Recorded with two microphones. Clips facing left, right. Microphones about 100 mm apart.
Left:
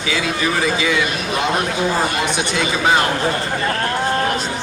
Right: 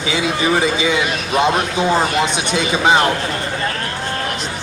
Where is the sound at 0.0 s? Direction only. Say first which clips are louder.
Right 2 dB; 20° right (ahead or behind).